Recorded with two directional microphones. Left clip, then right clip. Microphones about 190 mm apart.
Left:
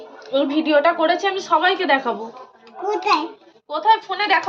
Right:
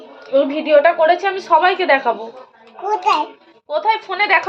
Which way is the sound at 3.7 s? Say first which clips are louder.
Even; 20° right (ahead or behind).